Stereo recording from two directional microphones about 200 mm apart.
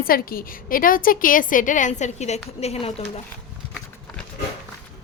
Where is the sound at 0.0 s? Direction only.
45° left (ahead or behind).